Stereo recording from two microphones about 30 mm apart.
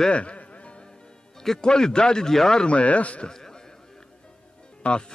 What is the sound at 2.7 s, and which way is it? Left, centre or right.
Speech, left.